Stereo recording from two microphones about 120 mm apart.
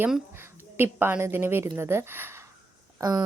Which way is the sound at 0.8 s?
20° right (ahead or behind).